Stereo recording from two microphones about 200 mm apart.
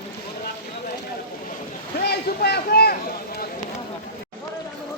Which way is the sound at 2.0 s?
55° left (ahead or behind).